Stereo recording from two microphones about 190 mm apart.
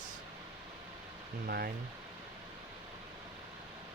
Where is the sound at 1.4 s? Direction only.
55° right (ahead or behind).